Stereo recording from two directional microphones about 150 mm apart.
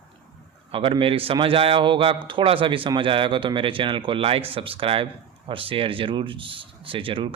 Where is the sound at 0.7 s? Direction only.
35° right (ahead or behind).